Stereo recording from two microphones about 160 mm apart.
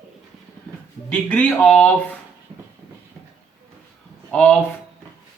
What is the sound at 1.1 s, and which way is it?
Speech, 10° left (ahead or behind).